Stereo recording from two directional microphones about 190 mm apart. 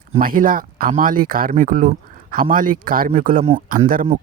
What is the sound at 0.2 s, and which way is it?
Speech, 45° right (ahead or behind).